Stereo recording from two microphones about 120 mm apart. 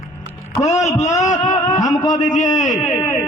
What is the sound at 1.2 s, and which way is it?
Speech, 90° left.